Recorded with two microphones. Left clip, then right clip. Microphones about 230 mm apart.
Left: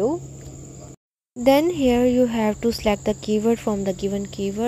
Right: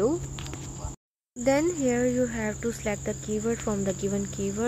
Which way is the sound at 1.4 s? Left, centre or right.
Left.